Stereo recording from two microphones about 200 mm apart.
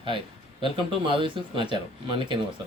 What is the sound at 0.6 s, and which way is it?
Speech, 25° right (ahead or behind).